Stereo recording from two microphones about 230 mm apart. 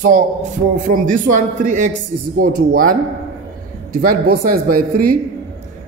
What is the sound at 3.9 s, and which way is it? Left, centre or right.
Speech, right.